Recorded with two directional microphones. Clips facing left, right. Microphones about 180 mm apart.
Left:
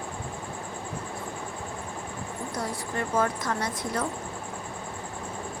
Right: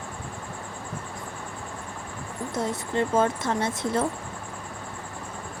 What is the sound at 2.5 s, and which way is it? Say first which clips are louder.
Speech: right 6 dB; 25° right (ahead or behind).